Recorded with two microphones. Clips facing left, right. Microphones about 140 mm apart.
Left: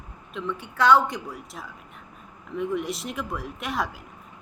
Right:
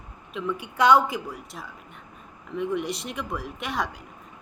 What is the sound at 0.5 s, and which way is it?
Speech, 15° right (ahead or behind).